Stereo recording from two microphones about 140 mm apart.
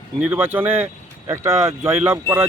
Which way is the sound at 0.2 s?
15° right (ahead or behind).